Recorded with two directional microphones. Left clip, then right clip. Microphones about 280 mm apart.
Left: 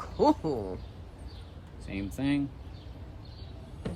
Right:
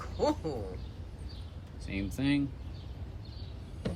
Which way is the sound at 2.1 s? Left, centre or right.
Centre.